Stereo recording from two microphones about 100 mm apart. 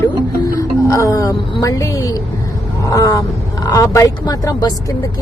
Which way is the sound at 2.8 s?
35° left (ahead or behind).